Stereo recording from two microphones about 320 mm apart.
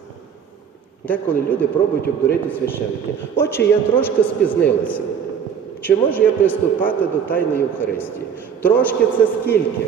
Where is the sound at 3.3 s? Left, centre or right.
Centre.